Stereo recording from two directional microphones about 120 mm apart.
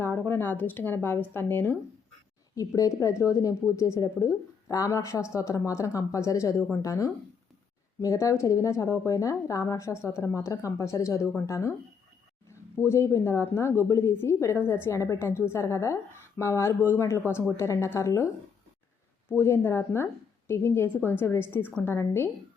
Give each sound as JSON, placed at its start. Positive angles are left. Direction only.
{"t": 0.0, "sound": "speech", "side_deg": 20}
{"t": 2.6, "sound": "a woman's voice", "side_deg": 30}
{"t": 19.3, "sound": "a woman's voice", "side_deg": 20}